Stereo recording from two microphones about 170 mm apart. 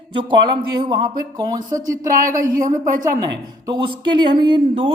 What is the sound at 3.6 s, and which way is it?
Speech, 25° right (ahead or behind).